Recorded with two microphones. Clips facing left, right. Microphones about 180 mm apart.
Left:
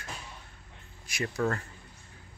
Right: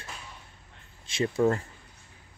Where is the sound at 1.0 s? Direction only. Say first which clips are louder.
Right 6 dB; 25° right (ahead or behind).